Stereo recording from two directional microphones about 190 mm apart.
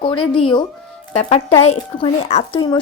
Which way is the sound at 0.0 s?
25° left (ahead or behind).